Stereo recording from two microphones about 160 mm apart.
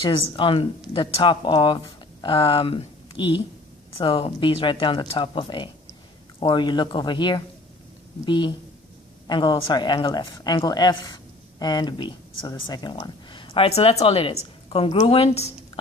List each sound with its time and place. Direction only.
0.0 s a woman's voice: 30° left (ahead or behind)